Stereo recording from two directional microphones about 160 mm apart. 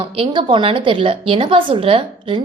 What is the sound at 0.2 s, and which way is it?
A woman's voice, 30° right (ahead or behind).